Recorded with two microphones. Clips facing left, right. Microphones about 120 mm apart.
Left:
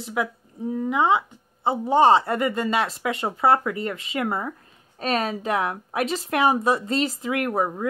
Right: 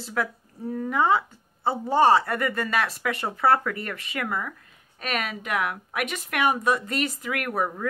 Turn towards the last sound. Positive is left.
turn(degrees=20)  # may be behind; listen again after turning